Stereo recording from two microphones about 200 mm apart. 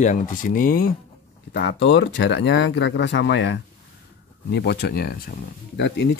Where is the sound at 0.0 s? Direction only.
40° left (ahead or behind).